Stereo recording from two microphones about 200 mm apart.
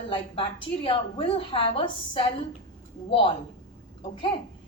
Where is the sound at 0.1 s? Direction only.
25° left (ahead or behind).